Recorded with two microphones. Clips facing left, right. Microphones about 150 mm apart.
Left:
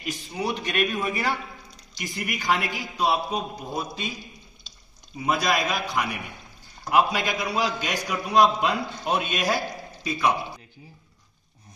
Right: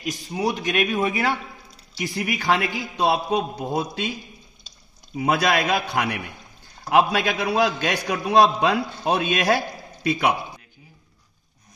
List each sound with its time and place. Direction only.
0.1 s a man's voice: 40° right (ahead or behind)
1.0 s a man's voice: 60° right (ahead or behind)
2.0 s a man's voice: 70° right (ahead or behind)
5.1 s a man's voice: 75° right (ahead or behind)
10.0 s a man's voice: 65° right (ahead or behind)